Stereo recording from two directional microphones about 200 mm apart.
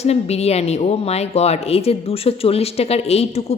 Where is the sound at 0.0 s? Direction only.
30° left (ahead or behind).